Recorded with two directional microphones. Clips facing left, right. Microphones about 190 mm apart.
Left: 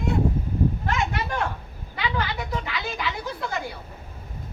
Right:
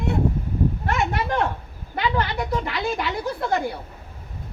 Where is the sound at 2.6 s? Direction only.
50° right (ahead or behind).